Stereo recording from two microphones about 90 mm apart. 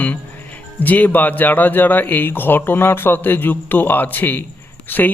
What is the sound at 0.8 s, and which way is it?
Speech, 20° left (ahead or behind).